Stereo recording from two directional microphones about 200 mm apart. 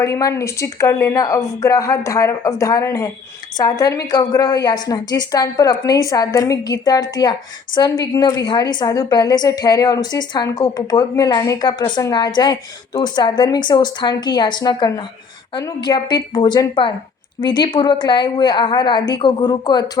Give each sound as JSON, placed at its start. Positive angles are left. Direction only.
{"t": 0.0, "sound": "a woman's voice", "side_deg": 15}